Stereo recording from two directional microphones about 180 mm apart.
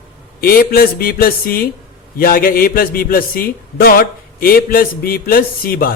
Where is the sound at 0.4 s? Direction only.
55° left (ahead or behind).